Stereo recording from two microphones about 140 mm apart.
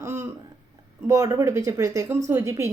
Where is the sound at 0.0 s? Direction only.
20° right (ahead or behind).